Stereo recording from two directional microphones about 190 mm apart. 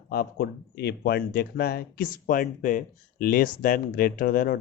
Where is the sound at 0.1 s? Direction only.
55° left (ahead or behind).